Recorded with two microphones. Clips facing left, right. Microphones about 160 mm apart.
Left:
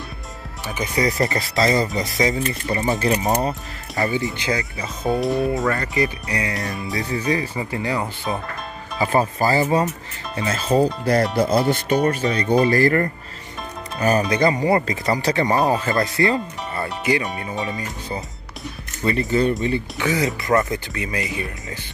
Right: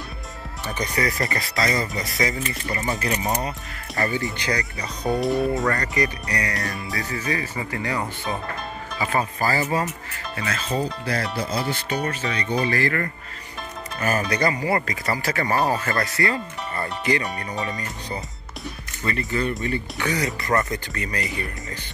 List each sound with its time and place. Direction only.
0.9 s speech: 20° left (ahead or behind)
4.0 s speech: 15° left (ahead or behind)
4.6 s speech: 5° left (ahead or behind)
5.9 s speech: 20° left (ahead or behind)
9.0 s speech: 30° left (ahead or behind)
10.7 s speech: 40° left (ahead or behind)
11.3 s speech: 50° left (ahead or behind)
13.9 s speech: 20° left (ahead or behind)